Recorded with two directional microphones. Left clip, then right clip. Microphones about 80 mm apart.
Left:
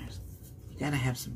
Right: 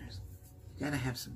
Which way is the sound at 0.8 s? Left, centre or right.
Right.